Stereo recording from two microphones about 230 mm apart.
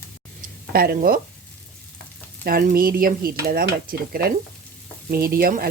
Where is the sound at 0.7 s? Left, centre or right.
Right.